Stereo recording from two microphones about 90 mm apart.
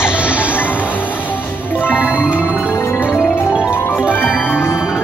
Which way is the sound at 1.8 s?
20° left (ahead or behind).